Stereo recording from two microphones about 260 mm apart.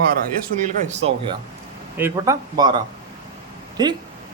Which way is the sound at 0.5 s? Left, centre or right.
Right.